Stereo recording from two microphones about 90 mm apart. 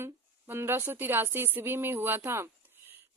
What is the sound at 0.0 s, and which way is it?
A woman's voice, 25° right (ahead or behind).